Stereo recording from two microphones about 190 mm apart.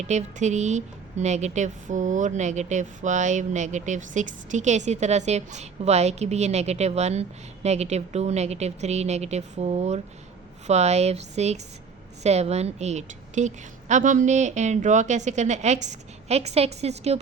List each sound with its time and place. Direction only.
0.0 s speech: 35° right (ahead or behind)